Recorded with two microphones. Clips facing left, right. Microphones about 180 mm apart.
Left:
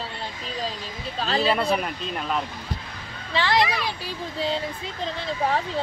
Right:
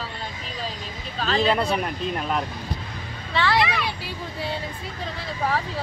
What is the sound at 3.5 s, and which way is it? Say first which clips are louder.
Speech: left 3 dB; 40° left (ahead or behind).